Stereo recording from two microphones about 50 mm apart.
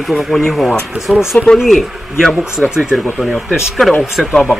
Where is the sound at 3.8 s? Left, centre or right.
Centre.